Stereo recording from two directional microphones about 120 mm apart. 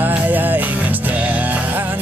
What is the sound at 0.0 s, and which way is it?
Music, 15° right (ahead or behind).